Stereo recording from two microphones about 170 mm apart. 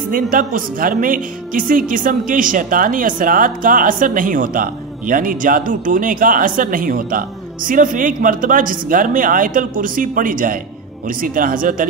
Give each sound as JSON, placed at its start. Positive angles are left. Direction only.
{"t": 0.1, "sound": "a woman's voice", "side_deg": -55}